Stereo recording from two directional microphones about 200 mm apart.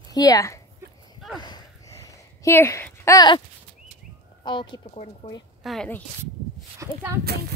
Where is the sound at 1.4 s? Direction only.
20° left (ahead or behind).